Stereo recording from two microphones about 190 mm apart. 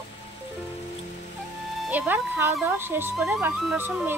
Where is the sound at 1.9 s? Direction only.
10° right (ahead or behind).